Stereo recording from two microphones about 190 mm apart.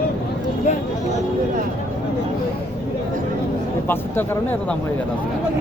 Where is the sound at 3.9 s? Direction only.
10° left (ahead or behind).